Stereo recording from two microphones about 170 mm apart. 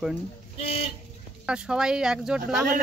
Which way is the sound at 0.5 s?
35° left (ahead or behind).